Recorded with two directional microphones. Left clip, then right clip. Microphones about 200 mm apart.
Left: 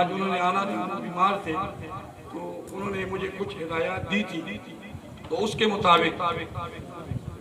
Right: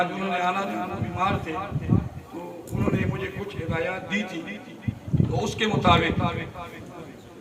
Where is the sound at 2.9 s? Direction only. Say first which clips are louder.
Even; 35° left (ahead or behind).